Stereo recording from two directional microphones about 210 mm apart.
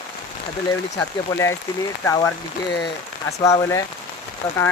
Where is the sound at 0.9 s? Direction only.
15° left (ahead or behind).